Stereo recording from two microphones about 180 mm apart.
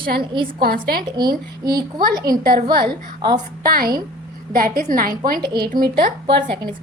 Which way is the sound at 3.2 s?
25° right (ahead or behind).